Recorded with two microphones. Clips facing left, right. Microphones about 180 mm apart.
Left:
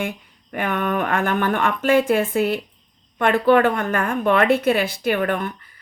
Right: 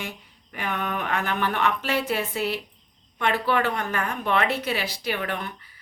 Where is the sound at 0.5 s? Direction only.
55° left (ahead or behind).